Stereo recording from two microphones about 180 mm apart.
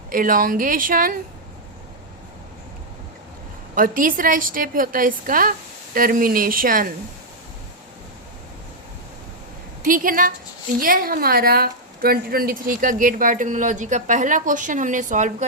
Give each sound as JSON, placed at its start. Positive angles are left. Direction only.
{"t": 0.1, "sound": "a woman's voice", "side_deg": -50}
{"t": 3.8, "sound": "a woman's voice", "side_deg": -50}
{"t": 9.8, "sound": "a woman's voice", "side_deg": -50}